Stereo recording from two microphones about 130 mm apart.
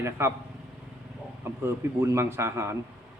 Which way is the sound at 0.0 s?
20° right (ahead or behind).